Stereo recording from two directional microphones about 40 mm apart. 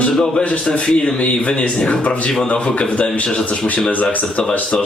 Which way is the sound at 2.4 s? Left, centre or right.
Left.